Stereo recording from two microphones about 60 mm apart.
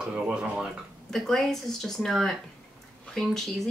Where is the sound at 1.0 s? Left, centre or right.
Centre.